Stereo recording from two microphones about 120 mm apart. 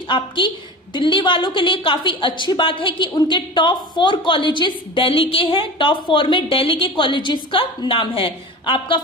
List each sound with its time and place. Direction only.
0.1 s a woman's voice: 45° left (ahead or behind)